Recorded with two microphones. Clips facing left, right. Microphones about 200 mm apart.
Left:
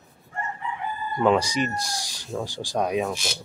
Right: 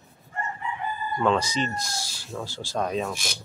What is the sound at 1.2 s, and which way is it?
Speech, 15° left (ahead or behind).